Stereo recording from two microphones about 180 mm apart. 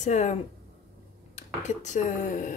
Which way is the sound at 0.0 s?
40° left (ahead or behind).